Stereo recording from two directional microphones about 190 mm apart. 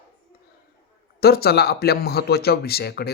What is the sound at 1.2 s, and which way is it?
Speech, 55° left (ahead or behind).